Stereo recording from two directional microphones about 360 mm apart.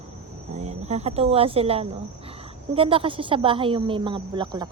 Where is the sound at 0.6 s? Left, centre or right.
Centre.